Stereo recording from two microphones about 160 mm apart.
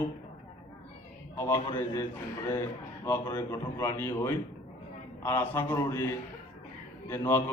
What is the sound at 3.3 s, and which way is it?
A man's voice, 15° left (ahead or behind).